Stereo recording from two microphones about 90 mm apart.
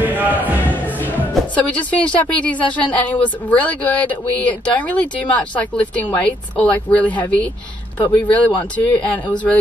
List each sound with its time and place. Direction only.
0.0 s music: 20° right (ahead or behind)
1.5 s a woman's voice: 15° left (ahead or behind)